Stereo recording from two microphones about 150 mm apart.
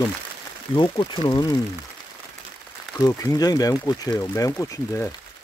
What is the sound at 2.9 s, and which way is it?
Speech, 25° left (ahead or behind).